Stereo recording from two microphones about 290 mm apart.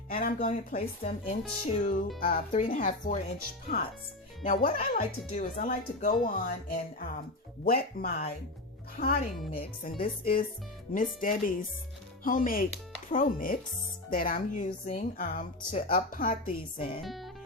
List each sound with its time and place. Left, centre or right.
0.1 s a woman's voice: left
17.0 s speech: centre